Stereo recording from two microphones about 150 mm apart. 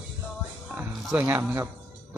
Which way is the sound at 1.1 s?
15° right (ahead or behind).